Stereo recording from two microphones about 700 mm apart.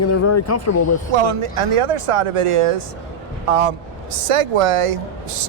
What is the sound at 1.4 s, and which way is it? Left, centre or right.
Speech, right.